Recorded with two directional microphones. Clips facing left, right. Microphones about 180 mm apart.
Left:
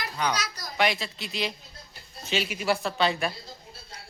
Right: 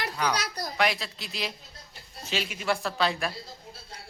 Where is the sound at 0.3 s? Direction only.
60° right (ahead or behind).